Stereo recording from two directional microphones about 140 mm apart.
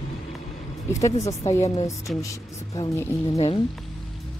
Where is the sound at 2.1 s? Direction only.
Centre (ahead or behind).